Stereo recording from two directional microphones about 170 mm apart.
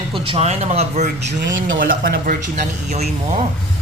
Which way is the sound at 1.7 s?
55° right (ahead or behind).